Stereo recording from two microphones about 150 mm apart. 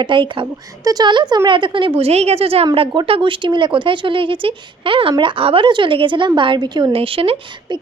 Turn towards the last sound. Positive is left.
turn(degrees=-40)  # may be behind; listen again after turning